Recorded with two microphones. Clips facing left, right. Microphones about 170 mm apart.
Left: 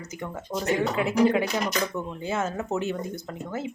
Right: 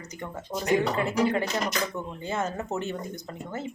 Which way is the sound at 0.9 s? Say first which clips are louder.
Left 3 dB; 5° left (ahead or behind).